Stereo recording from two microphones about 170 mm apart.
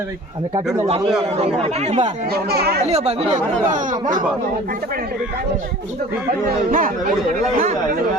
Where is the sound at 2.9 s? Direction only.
40° right (ahead or behind).